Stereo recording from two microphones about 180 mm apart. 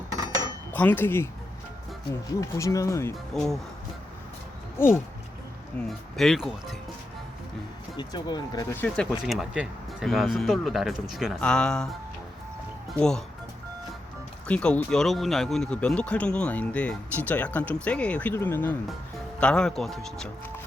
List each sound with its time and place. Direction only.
0.7 s speech: 10° left (ahead or behind)
2.4 s speech: 20° left (ahead or behind)
3.3 s speech: centre (ahead or behind)
4.8 s speech: 15° left (ahead or behind)
7.9 s speech: 25° left (ahead or behind)
8.7 s speech: 10° left (ahead or behind)
9.2 s speech: centre (ahead or behind)
14.4 s speech: 5° left (ahead or behind)